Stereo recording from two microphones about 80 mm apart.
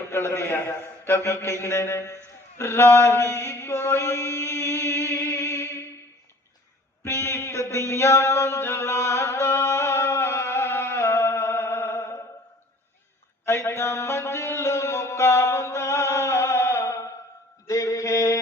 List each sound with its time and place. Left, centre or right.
0.1 s mantra: left
7.0 s mantra: left
13.4 s a sound: left
17.7 s mantra: left